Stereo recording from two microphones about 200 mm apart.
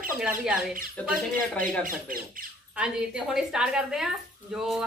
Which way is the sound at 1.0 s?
5° left (ahead or behind).